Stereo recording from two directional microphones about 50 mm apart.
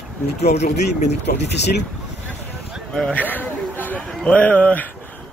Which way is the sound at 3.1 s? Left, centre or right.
Left.